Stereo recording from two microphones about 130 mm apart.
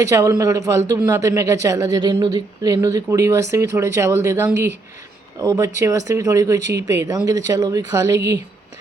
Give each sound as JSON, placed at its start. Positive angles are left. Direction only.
{"t": 0.0, "sound": "speech", "side_deg": -20}